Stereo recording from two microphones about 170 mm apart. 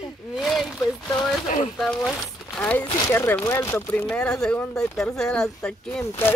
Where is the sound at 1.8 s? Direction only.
Centre (ahead or behind).